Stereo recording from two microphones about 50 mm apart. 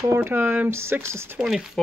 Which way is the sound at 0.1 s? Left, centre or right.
Right.